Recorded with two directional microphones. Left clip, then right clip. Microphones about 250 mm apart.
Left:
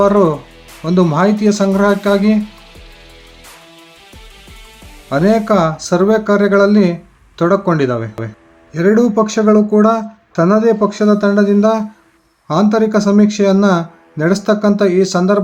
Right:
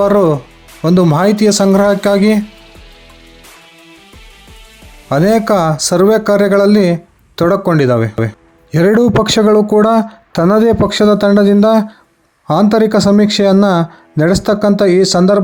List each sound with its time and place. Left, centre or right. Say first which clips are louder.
0.0 s speech: right 1 dB; right
5.0 s speech: right 2 dB; right